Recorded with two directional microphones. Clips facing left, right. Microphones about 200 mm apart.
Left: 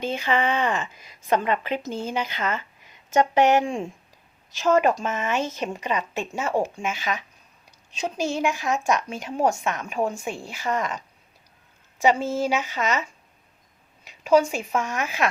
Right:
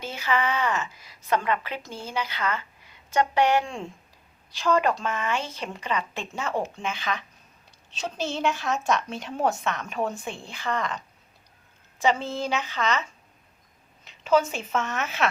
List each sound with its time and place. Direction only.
0.0 s a woman's voice: 20° left (ahead or behind)
12.0 s speech: 10° left (ahead or behind)
14.0 s speech: 10° left (ahead or behind)